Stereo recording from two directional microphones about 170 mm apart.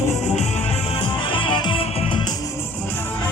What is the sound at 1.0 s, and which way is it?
Music, 30° left (ahead or behind).